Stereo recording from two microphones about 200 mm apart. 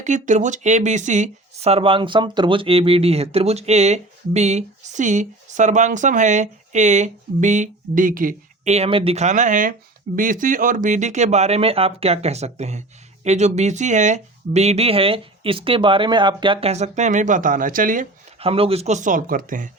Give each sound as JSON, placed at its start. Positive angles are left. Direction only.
{"t": 0.0, "sound": "speech", "side_deg": -35}